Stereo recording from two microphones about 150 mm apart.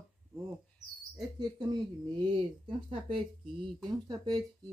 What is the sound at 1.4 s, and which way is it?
Speech, 25° right (ahead or behind).